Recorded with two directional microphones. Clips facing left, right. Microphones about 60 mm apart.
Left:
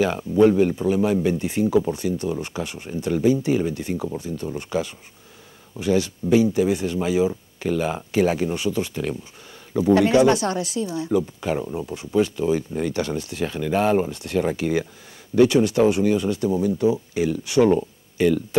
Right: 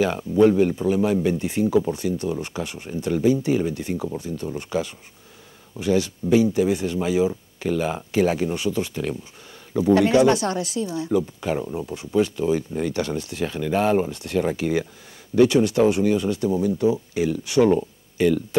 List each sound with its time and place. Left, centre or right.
0.4 s speech: left